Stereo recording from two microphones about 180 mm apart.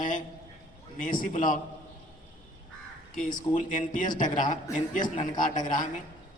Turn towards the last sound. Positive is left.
turn(degrees=45)  # may be behind; listen again after turning